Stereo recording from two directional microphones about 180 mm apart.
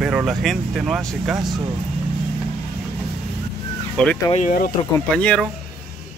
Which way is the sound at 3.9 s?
5° left (ahead or behind).